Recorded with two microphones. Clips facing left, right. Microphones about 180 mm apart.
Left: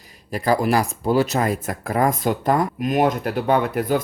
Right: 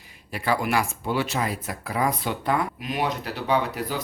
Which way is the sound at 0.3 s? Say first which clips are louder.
Left 6 dB; 40° left (ahead or behind).